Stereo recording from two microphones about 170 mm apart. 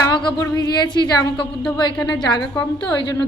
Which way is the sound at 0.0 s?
25° left (ahead or behind).